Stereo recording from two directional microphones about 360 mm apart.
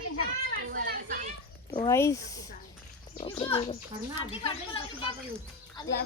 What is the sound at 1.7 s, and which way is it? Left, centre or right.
Speech, centre.